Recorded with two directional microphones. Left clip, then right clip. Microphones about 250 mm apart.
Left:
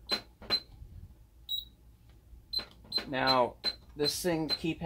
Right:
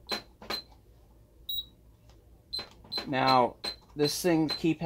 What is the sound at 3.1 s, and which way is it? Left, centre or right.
Speech, right.